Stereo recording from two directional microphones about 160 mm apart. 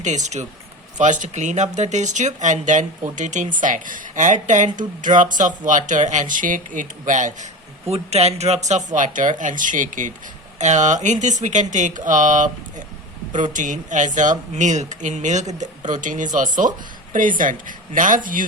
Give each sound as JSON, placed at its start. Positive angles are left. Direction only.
{"t": 0.0, "sound": "speech", "side_deg": -50}
{"t": 7.9, "sound": "speech", "side_deg": -40}